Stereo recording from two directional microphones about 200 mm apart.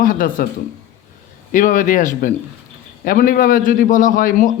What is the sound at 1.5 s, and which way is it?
A man's voice, 40° left (ahead or behind).